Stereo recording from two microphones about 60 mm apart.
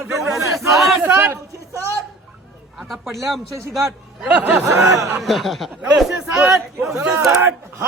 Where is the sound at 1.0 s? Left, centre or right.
Right.